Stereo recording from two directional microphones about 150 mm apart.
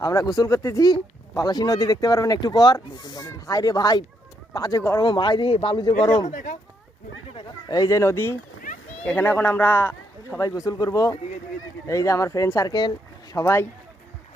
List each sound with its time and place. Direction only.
0.0 s speech: 20° left (ahead or behind)
4.9 s speech: 30° left (ahead or behind)
6.2 s speech: 55° left (ahead or behind)
7.7 s a man's voice: 25° left (ahead or behind)